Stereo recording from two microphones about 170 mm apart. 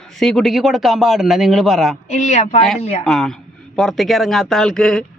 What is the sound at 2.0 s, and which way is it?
Speech, 40° left (ahead or behind).